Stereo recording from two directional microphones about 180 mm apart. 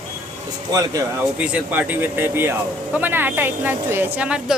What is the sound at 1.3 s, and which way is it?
Speech, 10° right (ahead or behind).